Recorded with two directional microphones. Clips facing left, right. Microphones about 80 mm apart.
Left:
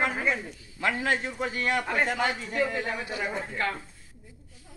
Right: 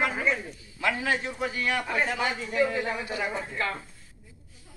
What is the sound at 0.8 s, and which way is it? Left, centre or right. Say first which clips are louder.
A man's voice: even; left.